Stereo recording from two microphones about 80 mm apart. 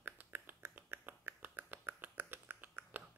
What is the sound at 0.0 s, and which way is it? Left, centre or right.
Finger snapping, right.